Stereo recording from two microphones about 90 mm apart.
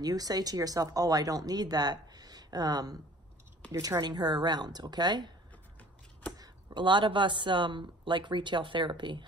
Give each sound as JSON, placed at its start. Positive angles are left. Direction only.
{"t": 0.0, "sound": "speech", "side_deg": -45}
{"t": 3.7, "sound": "a woman's voice", "side_deg": -35}
{"t": 4.0, "sound": "speech", "side_deg": -50}
{"t": 6.3, "sound": "speech", "side_deg": -50}